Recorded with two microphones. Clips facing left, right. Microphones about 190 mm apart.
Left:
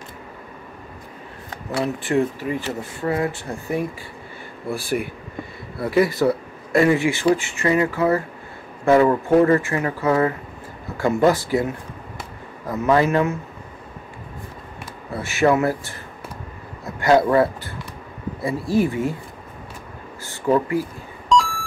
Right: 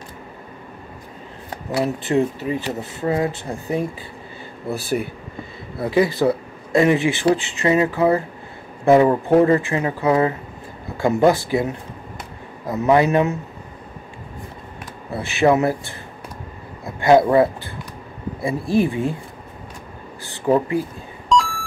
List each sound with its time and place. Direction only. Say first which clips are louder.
2.0 s speech: even; 20° right (ahead or behind)
5.8 s speech: even; 20° right (ahead or behind)
15.1 s speech: right 1 dB; 20° right (ahead or behind)
17.0 s speech: right 2 dB; 20° right (ahead or behind)
20.2 s speech: right 1 dB; 20° right (ahead or behind)
21.3 s beep: even; centre (ahead or behind)